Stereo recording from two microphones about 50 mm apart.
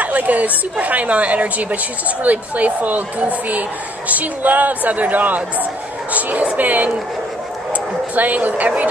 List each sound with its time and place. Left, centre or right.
0.0 s a woman's voice: right